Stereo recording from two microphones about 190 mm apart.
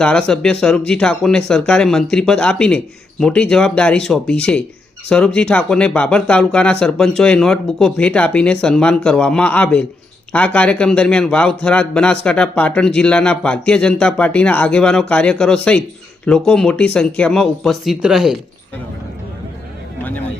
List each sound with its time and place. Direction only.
0.0 s speech: 5° left (ahead or behind)